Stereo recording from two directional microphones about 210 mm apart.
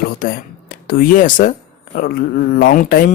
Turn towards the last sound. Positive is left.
turn(degrees=40)  # may be behind; listen again after turning